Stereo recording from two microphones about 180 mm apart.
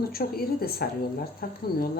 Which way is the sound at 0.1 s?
60° left (ahead or behind).